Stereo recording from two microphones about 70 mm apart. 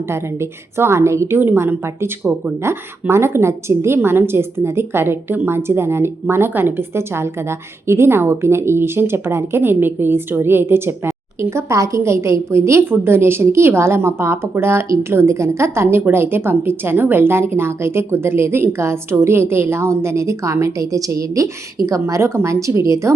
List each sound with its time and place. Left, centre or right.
0.1 s a woman's voice: right